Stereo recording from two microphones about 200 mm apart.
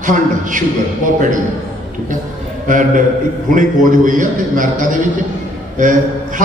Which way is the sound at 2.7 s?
40° right (ahead or behind).